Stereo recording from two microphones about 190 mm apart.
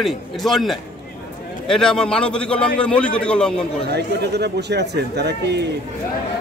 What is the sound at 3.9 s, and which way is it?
Speech, 60° right (ahead or behind).